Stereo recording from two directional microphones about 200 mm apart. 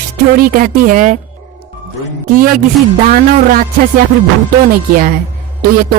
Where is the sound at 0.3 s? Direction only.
45° right (ahead or behind).